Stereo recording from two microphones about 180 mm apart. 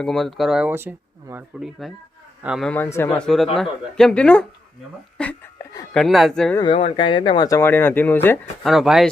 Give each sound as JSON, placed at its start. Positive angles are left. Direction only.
{"t": 0.0, "sound": "speech", "side_deg": 5}
{"t": 2.6, "sound": "speech", "side_deg": 10}
{"t": 5.1, "sound": "a sound", "side_deg": 5}
{"t": 5.9, "sound": "speech", "side_deg": 0}
{"t": 6.6, "sound": "speech", "side_deg": 30}
{"t": 8.6, "sound": "speech", "side_deg": 0}